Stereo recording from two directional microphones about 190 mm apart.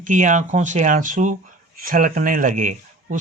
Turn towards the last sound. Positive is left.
turn(degrees=-40)  # may be behind; listen again after turning